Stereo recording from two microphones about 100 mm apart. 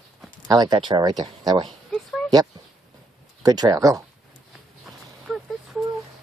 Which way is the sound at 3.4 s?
40° right (ahead or behind).